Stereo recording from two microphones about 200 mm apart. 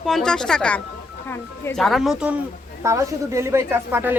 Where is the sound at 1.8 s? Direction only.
Centre (ahead or behind).